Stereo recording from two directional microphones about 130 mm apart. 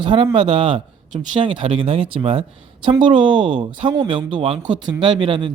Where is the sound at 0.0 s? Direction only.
40° right (ahead or behind).